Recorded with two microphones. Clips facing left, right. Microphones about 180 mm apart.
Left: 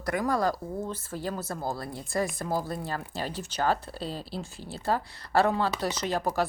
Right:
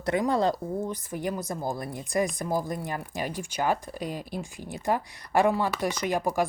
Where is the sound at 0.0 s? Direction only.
25° right (ahead or behind).